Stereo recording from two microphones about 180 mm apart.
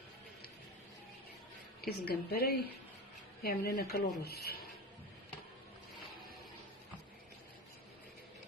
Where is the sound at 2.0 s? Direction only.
60° left (ahead or behind).